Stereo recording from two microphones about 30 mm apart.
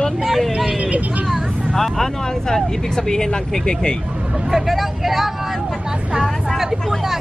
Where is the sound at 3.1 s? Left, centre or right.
Left.